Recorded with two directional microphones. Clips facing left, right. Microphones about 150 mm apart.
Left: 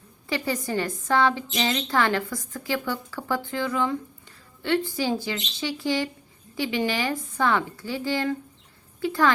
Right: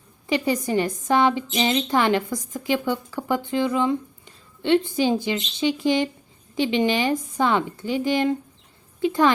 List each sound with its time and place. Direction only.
0.3 s a woman's voice: 20° right (ahead or behind)